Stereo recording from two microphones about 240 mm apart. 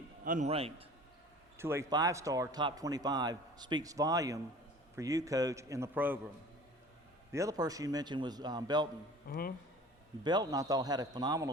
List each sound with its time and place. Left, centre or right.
0.3 s a man's voice: right
1.5 s speech: centre
7.3 s speech: centre
9.3 s speech: left
10.2 s speech: centre